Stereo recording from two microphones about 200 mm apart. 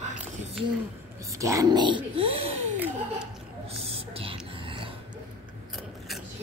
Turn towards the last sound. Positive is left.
turn(degrees=-25)  # may be behind; listen again after turning